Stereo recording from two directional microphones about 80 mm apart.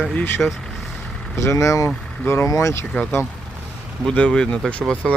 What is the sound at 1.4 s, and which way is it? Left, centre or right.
Speech, left.